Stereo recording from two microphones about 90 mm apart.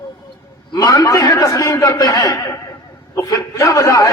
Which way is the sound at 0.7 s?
45° left (ahead or behind).